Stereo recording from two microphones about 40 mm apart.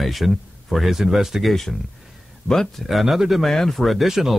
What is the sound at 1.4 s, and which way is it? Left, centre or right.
Speech, centre.